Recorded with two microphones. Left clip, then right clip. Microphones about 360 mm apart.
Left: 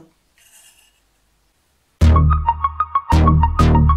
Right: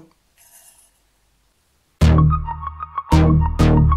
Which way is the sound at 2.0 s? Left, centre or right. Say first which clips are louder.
Left 3 dB; centre.